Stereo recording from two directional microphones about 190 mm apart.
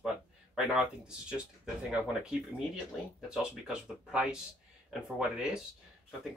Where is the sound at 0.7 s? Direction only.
5° right (ahead or behind).